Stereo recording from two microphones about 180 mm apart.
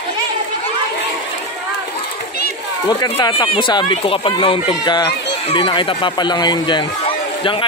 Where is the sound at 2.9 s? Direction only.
25° left (ahead or behind).